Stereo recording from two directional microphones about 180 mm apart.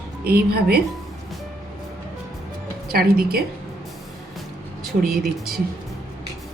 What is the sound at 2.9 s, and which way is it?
Speech, 55° right (ahead or behind).